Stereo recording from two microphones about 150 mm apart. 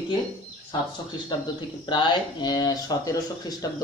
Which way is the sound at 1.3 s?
30° left (ahead or behind).